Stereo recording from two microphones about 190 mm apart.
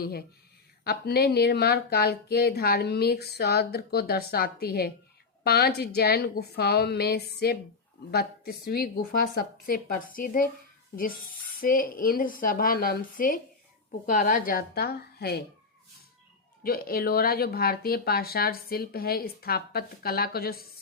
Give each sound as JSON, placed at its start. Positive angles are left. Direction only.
{"t": 0.0, "sound": "speech", "side_deg": 55}
{"t": 11.6, "sound": "speech", "side_deg": 50}
{"t": 16.6, "sound": "speech", "side_deg": 50}